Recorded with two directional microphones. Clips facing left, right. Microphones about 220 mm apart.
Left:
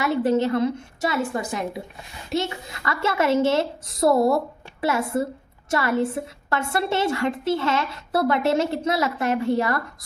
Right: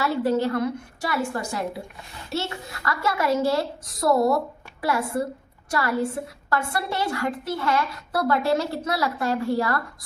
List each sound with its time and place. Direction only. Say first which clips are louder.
0.0 s a woman's voice: left 2 dB; 20° left (ahead or behind)